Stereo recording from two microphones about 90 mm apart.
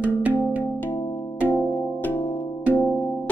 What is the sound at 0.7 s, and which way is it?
Music, 20° left (ahead or behind).